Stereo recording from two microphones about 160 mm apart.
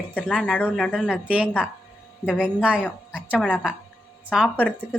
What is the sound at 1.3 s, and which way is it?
Speech, 10° right (ahead or behind).